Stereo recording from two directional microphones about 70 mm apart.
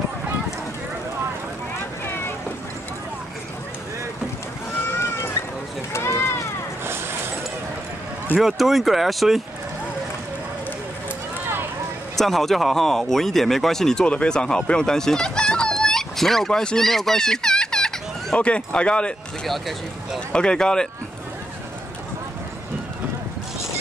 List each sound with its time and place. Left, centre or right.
5.0 s cat: left
5.9 s run: left
8.4 s speech: centre
12.2 s speech: centre
20.3 s speech: centre